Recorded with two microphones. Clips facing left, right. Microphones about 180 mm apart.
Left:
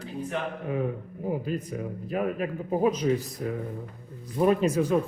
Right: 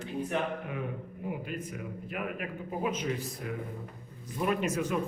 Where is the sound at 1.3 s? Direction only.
35° left (ahead or behind).